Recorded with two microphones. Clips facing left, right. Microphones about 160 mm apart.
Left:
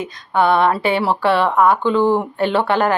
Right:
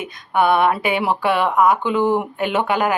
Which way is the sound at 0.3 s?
15° right (ahead or behind).